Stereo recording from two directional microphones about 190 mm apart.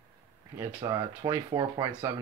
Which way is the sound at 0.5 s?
15° right (ahead or behind).